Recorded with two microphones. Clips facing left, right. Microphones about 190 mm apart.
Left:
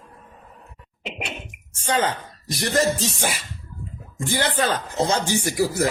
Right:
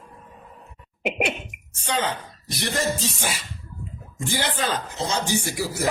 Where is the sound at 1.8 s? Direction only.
45° left (ahead or behind).